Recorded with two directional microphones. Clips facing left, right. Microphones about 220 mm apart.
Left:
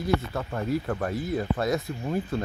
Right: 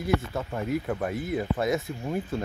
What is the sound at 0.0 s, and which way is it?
Speech, 5° right (ahead or behind).